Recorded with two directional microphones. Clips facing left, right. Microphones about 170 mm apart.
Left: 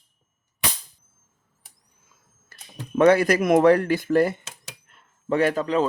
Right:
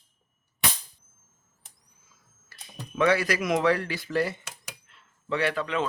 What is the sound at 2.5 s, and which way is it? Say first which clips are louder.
A man's voice: left 8 dB; 50° left (ahead or behind).